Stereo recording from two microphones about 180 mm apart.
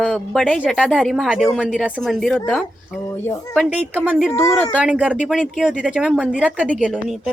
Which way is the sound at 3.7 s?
10° right (ahead or behind).